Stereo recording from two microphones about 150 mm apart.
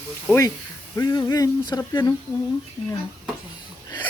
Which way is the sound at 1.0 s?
25° left (ahead or behind).